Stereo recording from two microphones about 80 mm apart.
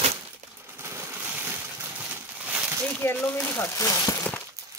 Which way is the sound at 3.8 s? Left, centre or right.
Left.